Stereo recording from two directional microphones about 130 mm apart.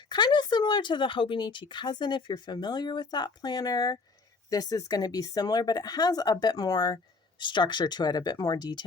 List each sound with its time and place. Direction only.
0.1 s speech: 35° left (ahead or behind)